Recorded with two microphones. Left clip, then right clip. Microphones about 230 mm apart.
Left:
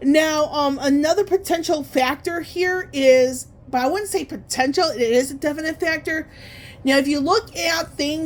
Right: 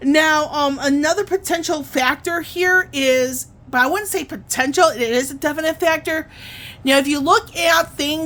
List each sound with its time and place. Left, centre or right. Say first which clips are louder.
0.0 s a woman's voice: right 2 dB; centre